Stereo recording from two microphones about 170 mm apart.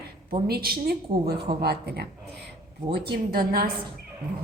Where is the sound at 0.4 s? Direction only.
65° right (ahead or behind).